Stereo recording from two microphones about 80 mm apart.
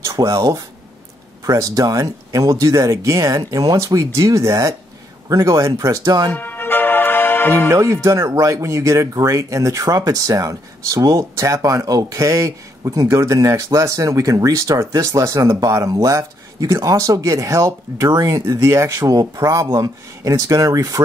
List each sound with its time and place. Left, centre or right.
0.0 s speech: right
6.3 s music: left
7.7 s speech: right